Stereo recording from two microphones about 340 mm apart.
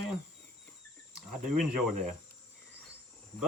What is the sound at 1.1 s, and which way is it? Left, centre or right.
Cricket, right.